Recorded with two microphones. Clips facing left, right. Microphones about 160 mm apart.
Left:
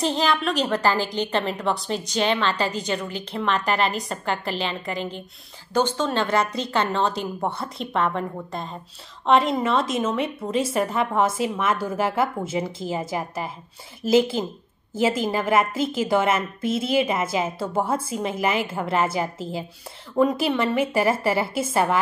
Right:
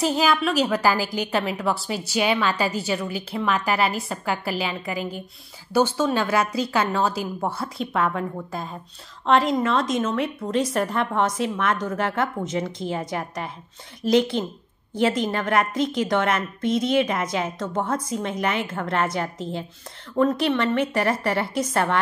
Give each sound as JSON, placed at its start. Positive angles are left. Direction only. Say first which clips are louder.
{"t": 0.0, "sound": "a woman's voice", "louder": "right 1 dB", "side_deg": -10}